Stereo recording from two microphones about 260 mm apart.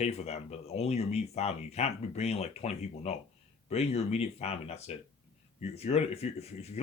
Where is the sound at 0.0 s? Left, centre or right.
Left.